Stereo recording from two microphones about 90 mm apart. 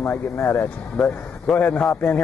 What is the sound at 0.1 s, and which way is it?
Speech, 20° left (ahead or behind).